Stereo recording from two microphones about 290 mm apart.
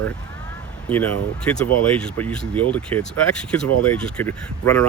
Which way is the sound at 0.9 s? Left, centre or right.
Centre.